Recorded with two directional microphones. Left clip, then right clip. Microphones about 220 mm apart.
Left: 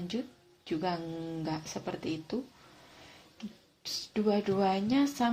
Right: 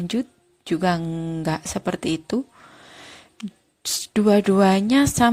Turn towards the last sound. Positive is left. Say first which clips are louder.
# right 11 dB
turn(degrees=-40)  # may be behind; listen again after turning